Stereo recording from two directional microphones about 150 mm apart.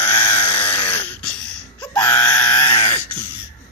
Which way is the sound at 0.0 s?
15° left (ahead or behind).